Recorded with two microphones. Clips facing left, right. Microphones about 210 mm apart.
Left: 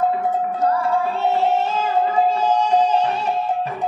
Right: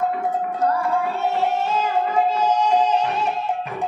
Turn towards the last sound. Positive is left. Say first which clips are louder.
# left 2 dB
turn(degrees=30)  # may be behind; listen again after turning